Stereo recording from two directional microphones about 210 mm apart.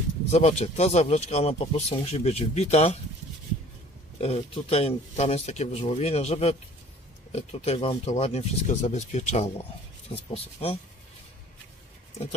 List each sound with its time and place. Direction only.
0.3 s speech: 30° left (ahead or behind)
4.2 s speech: 30° left (ahead or behind)